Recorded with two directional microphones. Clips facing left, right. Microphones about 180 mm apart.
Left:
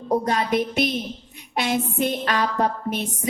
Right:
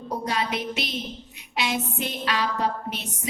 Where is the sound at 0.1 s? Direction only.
45° left (ahead or behind).